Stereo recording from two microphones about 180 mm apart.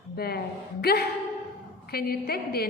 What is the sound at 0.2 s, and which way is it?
A woman's voice, 60° left (ahead or behind).